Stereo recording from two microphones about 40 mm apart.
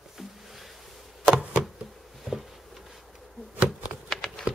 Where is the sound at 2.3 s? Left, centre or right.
Centre.